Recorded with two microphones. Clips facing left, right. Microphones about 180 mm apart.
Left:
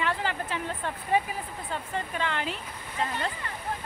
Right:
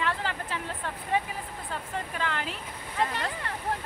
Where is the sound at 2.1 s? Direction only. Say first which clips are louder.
Left 2 dB; centre (ahead or behind).